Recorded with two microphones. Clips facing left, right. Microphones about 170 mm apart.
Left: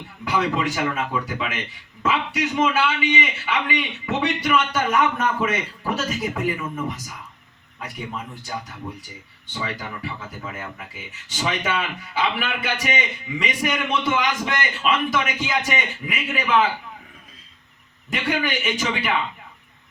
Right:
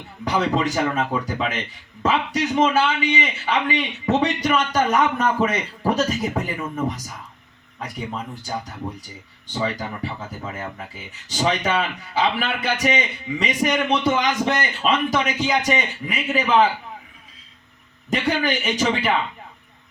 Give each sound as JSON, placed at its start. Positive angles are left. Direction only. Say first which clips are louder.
{"t": 0.3, "sound": "a man's voice", "louder": "right 2 dB", "side_deg": -35}
{"t": 18.1, "sound": "a man's voice", "louder": "right 3 dB", "side_deg": -35}